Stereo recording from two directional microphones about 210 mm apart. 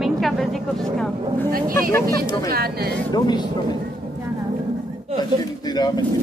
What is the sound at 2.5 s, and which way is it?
Speech, 45° right (ahead or behind).